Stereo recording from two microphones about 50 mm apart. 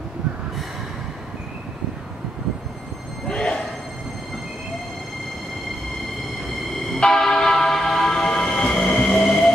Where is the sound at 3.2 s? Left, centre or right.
Centre.